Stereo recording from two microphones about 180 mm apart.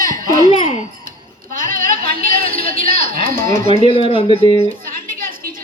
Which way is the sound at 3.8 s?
35° left (ahead or behind).